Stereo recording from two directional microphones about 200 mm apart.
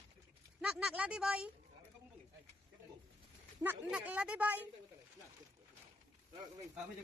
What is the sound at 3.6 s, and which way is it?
A woman's voice, 10° right (ahead or behind).